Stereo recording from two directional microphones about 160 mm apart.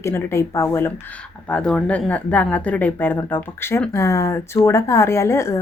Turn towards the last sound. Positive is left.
turn(degrees=15)  # may be behind; listen again after turning